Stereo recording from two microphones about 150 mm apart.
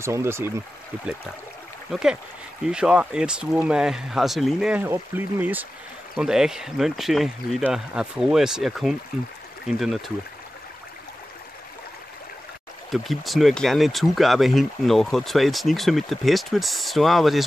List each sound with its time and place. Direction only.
0.0 s speech: 15° right (ahead or behind)
1.9 s speech: 5° right (ahead or behind)
12.9 s speech: centre (ahead or behind)